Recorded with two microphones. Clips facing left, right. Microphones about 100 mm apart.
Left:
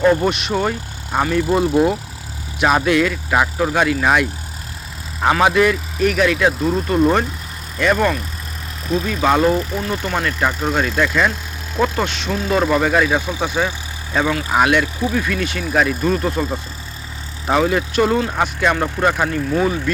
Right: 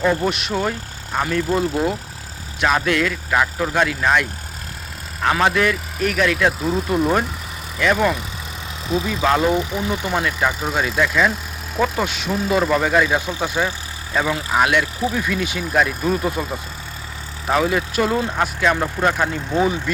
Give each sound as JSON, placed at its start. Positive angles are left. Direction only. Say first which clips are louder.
{"t": 0.0, "sound": "speech", "louder": "left 4 dB", "side_deg": 0}
{"t": 5.3, "sound": "speech", "louder": "left 3 dB", "side_deg": 5}
{"t": 19.3, "sound": "speech", "louder": "left 1 dB", "side_deg": -15}